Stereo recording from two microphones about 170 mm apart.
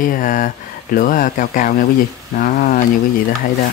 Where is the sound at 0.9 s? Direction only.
55° left (ahead or behind).